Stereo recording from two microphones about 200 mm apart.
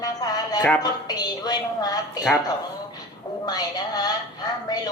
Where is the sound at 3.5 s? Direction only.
20° left (ahead or behind).